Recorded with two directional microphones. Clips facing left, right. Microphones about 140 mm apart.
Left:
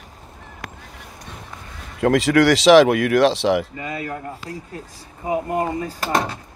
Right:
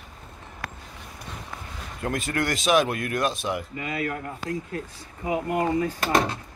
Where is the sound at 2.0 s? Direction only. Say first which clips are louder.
Left 12 dB; 90° left.